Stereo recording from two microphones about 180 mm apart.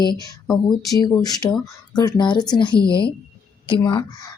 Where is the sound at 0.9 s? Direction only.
20° left (ahead or behind).